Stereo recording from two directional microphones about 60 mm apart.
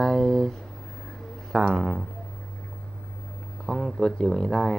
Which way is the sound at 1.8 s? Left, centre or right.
Centre.